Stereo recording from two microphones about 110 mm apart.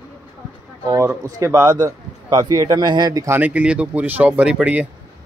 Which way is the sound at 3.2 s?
15° right (ahead or behind).